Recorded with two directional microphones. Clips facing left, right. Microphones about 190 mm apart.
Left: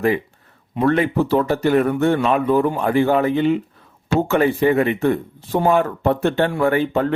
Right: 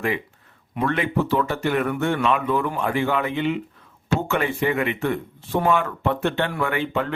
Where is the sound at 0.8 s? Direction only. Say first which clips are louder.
Left 6 dB; 35° left (ahead or behind).